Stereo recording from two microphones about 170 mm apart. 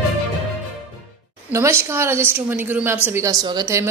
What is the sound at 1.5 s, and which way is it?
A woman's voice, 15° right (ahead or behind).